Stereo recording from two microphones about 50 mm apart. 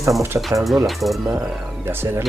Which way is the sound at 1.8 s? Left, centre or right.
Right.